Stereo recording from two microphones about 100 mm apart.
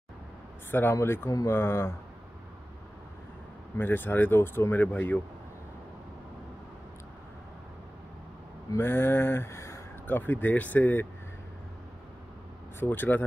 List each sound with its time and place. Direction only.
0.7 s speech: 20° left (ahead or behind)
3.7 s speech: 20° left (ahead or behind)
8.7 s speech: 25° left (ahead or behind)
12.7 s speech: 20° left (ahead or behind)